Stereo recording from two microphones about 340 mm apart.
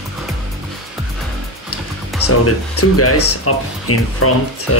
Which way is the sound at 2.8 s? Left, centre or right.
Left.